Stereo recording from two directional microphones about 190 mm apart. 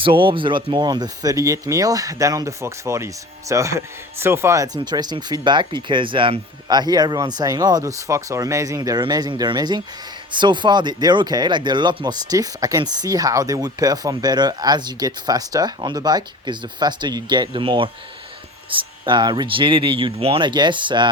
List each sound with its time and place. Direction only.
0.0 s speech: 25° right (ahead or behind)